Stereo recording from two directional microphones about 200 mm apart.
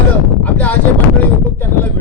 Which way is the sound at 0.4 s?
10° left (ahead or behind).